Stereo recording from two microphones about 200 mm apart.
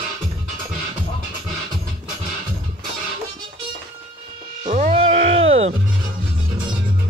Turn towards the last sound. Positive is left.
turn(degrees=-30)  # may be behind; listen again after turning